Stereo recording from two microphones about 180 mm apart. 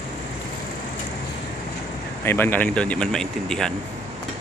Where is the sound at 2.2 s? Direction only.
10° left (ahead or behind).